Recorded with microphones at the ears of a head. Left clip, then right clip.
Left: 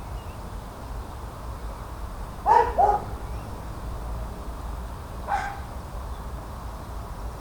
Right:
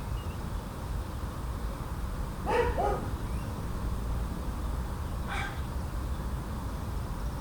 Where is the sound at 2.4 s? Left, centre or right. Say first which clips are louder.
Left 10 dB; left.